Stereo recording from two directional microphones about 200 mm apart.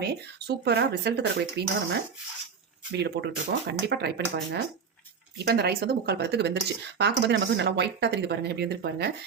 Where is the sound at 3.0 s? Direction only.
55° right (ahead or behind).